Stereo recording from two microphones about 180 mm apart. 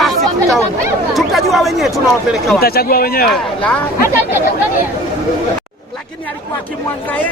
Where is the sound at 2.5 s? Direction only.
55° left (ahead or behind).